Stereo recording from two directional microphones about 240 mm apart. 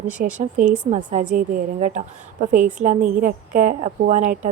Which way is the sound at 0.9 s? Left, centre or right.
Right.